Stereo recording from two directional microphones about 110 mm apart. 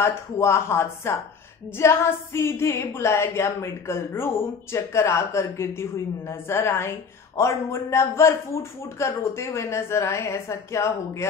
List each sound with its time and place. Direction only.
0.0 s a woman's voice: 25° left (ahead or behind)